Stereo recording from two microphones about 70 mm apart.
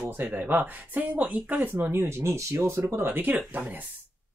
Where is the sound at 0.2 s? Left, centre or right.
Right.